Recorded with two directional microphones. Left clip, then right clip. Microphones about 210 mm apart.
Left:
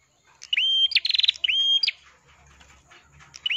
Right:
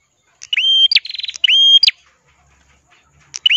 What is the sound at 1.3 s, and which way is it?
Bird, 40° right (ahead or behind).